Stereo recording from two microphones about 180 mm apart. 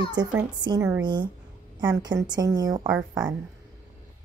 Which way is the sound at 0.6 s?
20° right (ahead or behind).